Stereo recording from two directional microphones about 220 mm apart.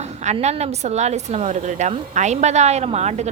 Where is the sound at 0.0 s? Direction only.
30° right (ahead or behind).